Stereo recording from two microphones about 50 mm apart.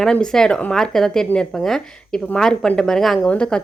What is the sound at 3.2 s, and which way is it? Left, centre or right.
Speech, centre.